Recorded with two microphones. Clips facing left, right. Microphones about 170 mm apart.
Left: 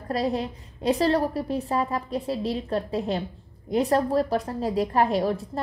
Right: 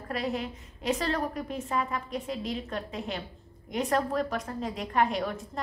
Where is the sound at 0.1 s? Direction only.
35° left (ahead or behind).